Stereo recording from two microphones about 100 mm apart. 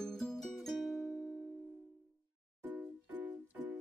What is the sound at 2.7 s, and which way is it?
Music, 15° right (ahead or behind).